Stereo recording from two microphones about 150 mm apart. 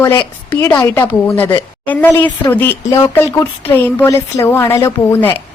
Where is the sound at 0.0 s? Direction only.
25° left (ahead or behind).